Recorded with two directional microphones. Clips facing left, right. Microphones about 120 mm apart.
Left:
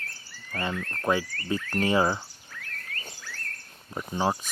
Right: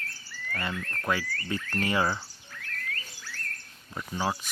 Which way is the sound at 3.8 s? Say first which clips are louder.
Left 3 dB; 25° left (ahead or behind).